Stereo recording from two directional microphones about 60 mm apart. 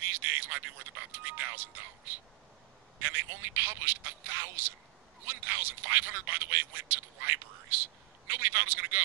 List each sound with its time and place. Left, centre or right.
0.0 s a sound: right
1.2 s speech: right
3.0 s speech: right